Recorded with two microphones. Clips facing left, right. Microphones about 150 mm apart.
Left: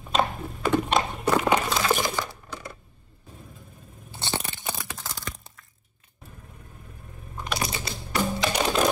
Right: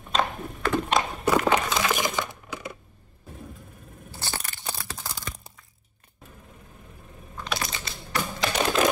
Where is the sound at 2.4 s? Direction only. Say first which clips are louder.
Right 2 dB; 10° right (ahead or behind).